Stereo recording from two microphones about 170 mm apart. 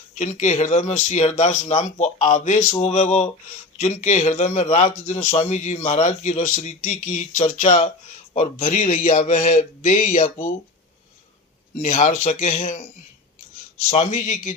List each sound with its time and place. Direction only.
0.2 s speech: 45° left (ahead or behind)
11.8 s speech: 45° left (ahead or behind)
14.1 s speech: 45° left (ahead or behind)